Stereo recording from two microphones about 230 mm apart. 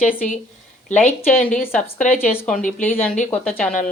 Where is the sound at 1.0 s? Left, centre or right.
Centre.